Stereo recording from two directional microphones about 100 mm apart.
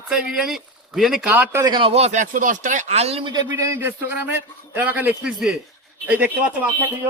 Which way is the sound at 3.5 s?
30° right (ahead or behind).